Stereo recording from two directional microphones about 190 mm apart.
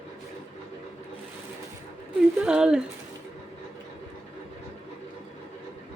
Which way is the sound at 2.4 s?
5° right (ahead or behind).